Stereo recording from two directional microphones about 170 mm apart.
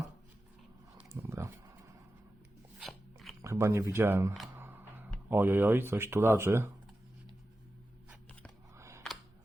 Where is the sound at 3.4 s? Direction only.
15° right (ahead or behind).